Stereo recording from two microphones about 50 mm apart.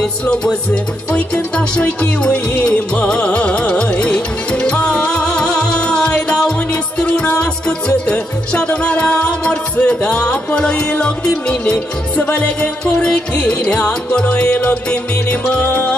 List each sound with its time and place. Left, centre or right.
0.2 s music: centre; by 15.9 s left